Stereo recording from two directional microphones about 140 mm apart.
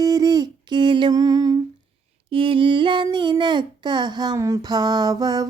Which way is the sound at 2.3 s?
40° right (ahead or behind).